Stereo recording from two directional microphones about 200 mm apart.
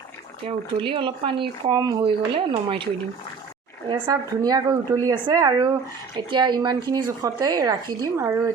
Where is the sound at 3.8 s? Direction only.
25° right (ahead or behind).